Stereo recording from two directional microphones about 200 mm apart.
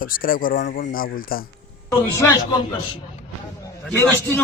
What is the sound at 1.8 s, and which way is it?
Speech, 15° left (ahead or behind).